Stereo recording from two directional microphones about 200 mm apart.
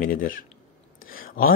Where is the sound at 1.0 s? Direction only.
45° left (ahead or behind).